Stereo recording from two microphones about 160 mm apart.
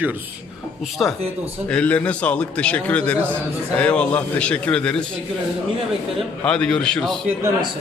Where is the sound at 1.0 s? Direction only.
Centre (ahead or behind).